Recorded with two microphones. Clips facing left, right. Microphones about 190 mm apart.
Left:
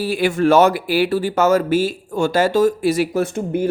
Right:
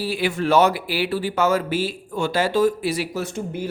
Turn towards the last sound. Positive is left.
turn(degrees=55)  # may be behind; listen again after turning